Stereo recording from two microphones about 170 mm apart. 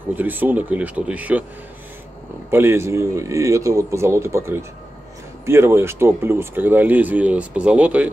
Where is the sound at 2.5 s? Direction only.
15° right (ahead or behind).